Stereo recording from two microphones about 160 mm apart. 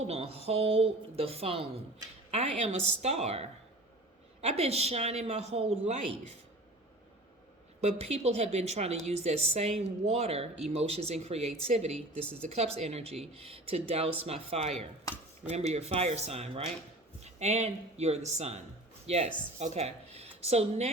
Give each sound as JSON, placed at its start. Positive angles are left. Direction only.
{"t": 0.1, "sound": "a woman's voice", "side_deg": -40}
{"t": 7.8, "sound": "a woman's voice", "side_deg": -40}